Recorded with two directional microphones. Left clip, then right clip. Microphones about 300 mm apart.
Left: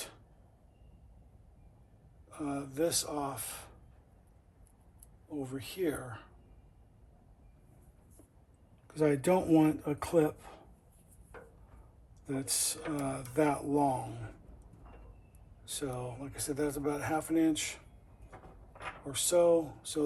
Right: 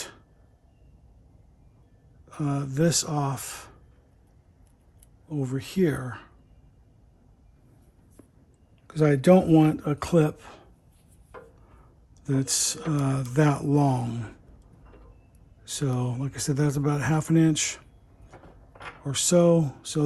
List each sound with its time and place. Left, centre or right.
2.3 s speech: right
5.4 s speech: right
8.9 s speech: right
12.2 s speech: right
15.6 s speech: right
19.1 s speech: right